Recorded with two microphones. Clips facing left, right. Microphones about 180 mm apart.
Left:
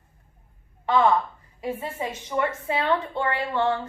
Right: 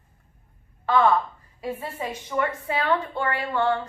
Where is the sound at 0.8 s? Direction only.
20° left (ahead or behind).